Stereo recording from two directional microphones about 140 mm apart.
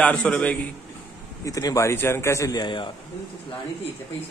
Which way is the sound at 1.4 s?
25° left (ahead or behind).